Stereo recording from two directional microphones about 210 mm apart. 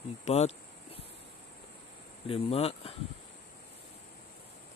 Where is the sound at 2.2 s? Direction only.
25° left (ahead or behind).